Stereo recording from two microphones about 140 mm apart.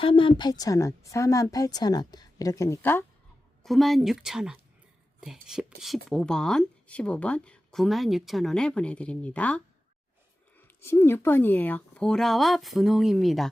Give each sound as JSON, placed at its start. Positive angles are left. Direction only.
{"t": 0.0, "sound": "a woman's voice", "side_deg": 40}
{"t": 3.6, "sound": "speech", "side_deg": 0}
{"t": 10.8, "sound": "speech", "side_deg": 20}